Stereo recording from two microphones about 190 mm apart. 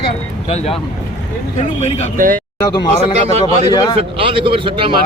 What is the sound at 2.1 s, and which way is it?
Speech, 45° right (ahead or behind).